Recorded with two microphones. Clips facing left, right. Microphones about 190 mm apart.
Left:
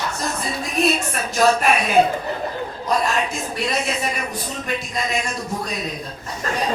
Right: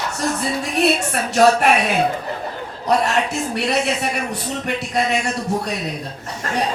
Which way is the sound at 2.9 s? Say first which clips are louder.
Right 4 dB; 70° right (ahead or behind).